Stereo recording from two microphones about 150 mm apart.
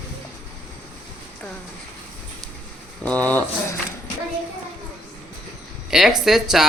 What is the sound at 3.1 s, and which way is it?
Speech, 10° left (ahead or behind).